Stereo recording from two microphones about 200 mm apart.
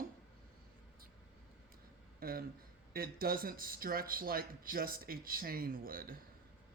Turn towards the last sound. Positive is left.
turn(degrees=-45)  # may be behind; listen again after turning